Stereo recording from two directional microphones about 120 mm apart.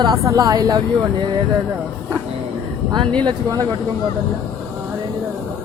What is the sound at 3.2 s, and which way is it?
Speech, 30° right (ahead or behind).